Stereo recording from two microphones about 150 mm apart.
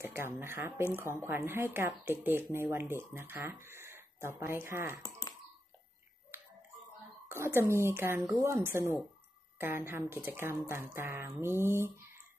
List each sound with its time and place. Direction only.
0.0 s speech: 15° right (ahead or behind)
7.2 s speech: 15° right (ahead or behind)